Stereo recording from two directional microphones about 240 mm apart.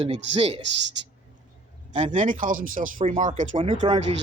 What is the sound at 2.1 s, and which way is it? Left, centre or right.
Speech, right.